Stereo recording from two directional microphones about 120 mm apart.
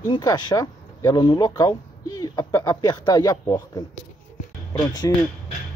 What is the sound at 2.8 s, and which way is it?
Speech, 35° left (ahead or behind).